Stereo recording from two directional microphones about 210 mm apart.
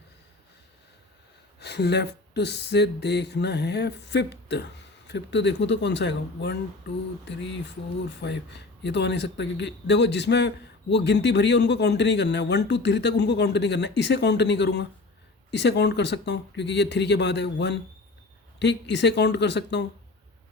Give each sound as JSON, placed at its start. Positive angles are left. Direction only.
{"t": 1.5, "sound": "a man's voice", "side_deg": 50}